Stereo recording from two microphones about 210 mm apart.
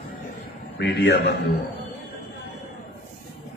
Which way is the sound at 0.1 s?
40° left (ahead or behind).